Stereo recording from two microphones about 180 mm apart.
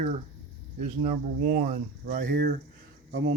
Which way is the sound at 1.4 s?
50° right (ahead or behind).